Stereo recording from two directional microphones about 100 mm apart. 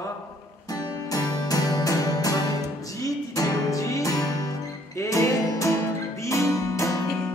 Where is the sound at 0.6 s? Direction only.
40° left (ahead or behind).